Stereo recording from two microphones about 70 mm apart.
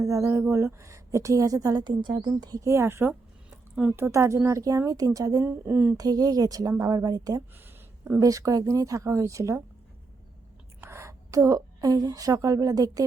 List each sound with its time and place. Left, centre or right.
0.0 s a woman's voice: right
2.3 s a woman's voice: right
2.6 s a woman's voice: right
5.6 s a woman's voice: right
6.0 s a woman's voice: right
8.2 s speech: right
10.8 s a woman's voice: right